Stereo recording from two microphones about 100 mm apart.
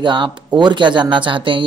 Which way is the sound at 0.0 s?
50° right (ahead or behind).